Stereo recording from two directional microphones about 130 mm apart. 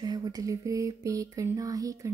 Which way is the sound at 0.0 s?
30° right (ahead or behind).